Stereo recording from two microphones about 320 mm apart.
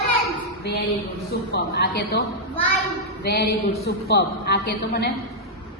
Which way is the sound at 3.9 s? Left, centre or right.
Left.